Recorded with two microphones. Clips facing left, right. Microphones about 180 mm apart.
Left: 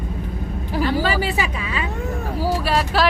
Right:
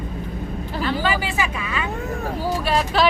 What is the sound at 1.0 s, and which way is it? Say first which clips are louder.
Speech: left 1 dB; 35° left (ahead or behind).